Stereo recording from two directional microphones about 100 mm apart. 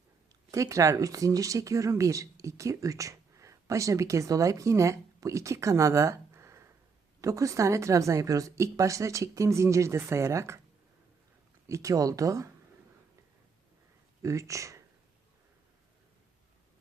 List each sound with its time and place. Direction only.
0.5 s a woman's voice: 35° right (ahead or behind)
11.7 s a woman's voice: 35° right (ahead or behind)
14.2 s speech: 30° right (ahead or behind)